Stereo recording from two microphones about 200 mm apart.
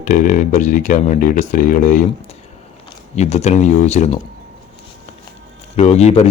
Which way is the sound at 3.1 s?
35° left (ahead or behind).